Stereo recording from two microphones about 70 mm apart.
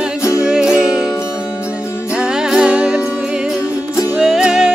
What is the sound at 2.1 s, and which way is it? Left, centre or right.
Music, centre.